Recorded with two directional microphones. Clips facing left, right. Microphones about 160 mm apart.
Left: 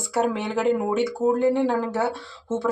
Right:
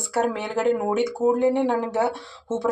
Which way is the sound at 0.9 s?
15° right (ahead or behind).